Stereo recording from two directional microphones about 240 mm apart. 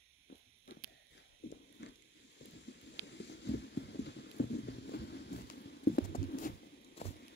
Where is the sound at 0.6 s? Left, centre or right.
Left.